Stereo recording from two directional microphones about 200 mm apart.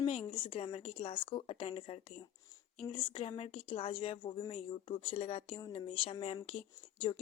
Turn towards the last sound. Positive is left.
turn(degrees=30)  # may be behind; listen again after turning